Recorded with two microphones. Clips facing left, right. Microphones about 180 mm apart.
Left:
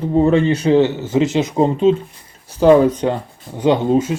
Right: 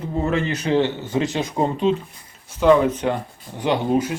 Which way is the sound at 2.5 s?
35° left (ahead or behind).